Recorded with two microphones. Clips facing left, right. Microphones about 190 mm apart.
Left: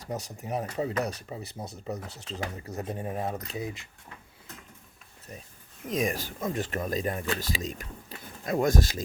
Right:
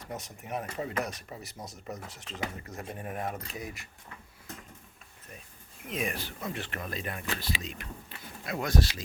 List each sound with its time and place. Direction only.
0.0 s speech: 35° left (ahead or behind)
5.8 s speech: 40° left (ahead or behind)